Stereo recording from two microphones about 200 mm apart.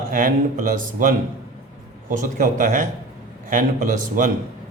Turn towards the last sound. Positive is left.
turn(degrees=-40)  # may be behind; listen again after turning